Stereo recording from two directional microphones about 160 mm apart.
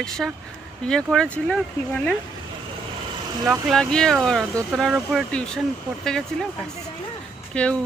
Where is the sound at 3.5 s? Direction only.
Centre (ahead or behind).